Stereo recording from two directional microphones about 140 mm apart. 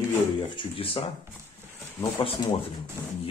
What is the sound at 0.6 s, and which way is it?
Speech, 40° left (ahead or behind).